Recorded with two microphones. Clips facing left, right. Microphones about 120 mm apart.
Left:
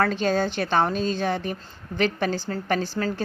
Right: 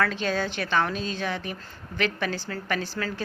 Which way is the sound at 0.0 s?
40° left (ahead or behind).